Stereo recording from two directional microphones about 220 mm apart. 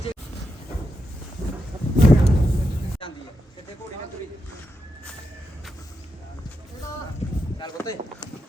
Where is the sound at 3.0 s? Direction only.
25° left (ahead or behind).